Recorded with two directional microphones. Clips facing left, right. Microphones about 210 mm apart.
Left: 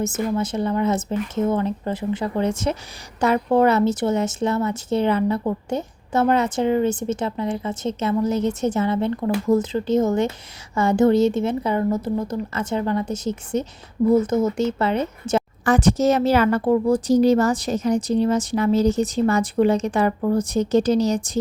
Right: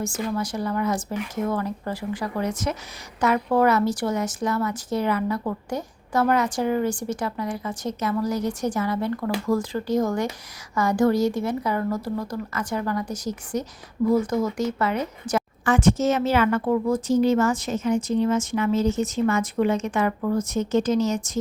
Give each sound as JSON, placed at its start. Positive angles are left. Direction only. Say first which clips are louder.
{"t": 0.0, "sound": "a woman's voice", "louder": "left 4 dB", "side_deg": 20}